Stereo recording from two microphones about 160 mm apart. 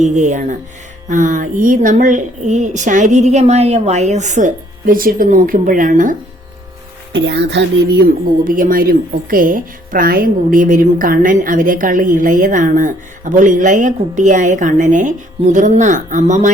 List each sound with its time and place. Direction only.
0.0 s a woman's voice: 50° right (ahead or behind)
7.1 s speech: 90° right
8.0 s a woman's voice: 60° right (ahead or behind)